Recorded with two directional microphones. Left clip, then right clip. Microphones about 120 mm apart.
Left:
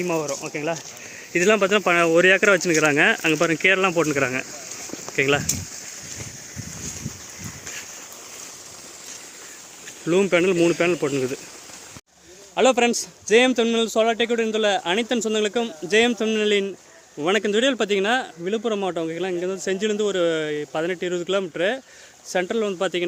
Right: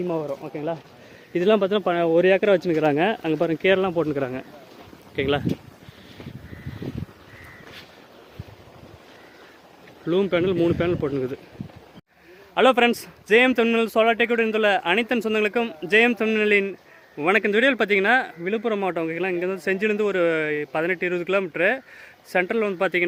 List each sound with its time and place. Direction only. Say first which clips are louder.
0.2 s speech: left 2 dB; 15° left (ahead or behind)
1.3 s speech: left 2 dB; 10° right (ahead or behind)
10.1 s speech: left 3 dB; 10° left (ahead or behind)
12.5 s speech: right 1 dB; 10° right (ahead or behind)